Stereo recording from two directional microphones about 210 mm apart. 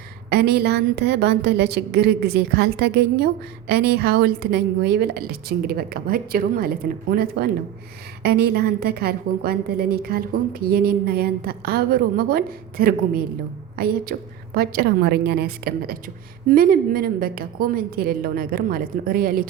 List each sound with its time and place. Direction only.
0.3 s a woman's voice: 50° right (ahead or behind)